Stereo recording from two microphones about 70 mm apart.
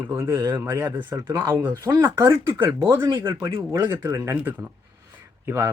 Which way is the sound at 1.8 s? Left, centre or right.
Right.